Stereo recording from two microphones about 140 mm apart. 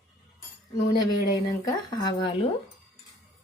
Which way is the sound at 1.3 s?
30° left (ahead or behind).